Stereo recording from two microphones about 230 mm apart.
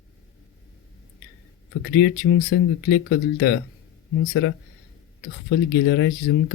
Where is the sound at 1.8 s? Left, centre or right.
Left.